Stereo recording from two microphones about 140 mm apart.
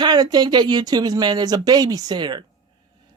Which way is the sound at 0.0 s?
30° right (ahead or behind).